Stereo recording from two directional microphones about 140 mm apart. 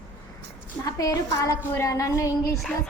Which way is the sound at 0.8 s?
25° left (ahead or behind).